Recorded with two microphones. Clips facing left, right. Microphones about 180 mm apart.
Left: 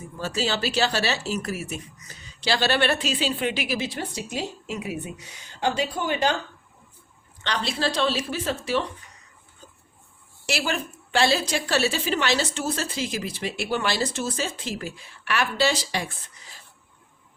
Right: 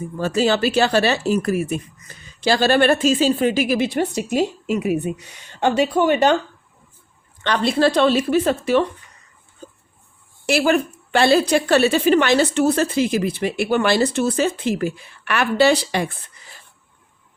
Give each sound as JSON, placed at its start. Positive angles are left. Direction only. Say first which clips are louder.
{"t": 0.2, "sound": "speech", "louder": "right 8 dB", "side_deg": -55}
{"t": 7.4, "sound": "speech", "louder": "right 9 dB", "side_deg": -55}
{"t": 10.4, "sound": "speech", "louder": "right 10 dB", "side_deg": -55}